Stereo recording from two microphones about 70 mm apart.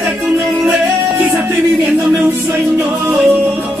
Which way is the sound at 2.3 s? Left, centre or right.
Right.